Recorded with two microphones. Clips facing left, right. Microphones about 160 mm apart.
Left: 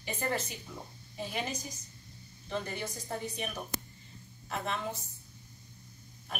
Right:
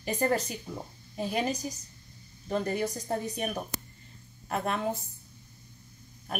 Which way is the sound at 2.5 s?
40° right (ahead or behind).